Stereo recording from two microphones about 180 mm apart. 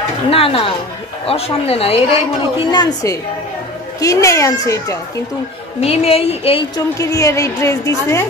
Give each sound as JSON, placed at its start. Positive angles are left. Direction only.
{"t": 0.3, "sound": "a woman's voice", "side_deg": 30}
{"t": 5.8, "sound": "a woman's voice", "side_deg": 35}
{"t": 7.0, "sound": "a woman's voice", "side_deg": 15}